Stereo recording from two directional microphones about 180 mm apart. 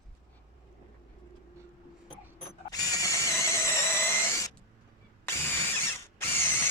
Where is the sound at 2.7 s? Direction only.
20° left (ahead or behind).